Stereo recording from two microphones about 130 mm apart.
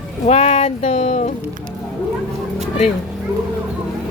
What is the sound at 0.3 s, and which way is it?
Speech, 55° left (ahead or behind).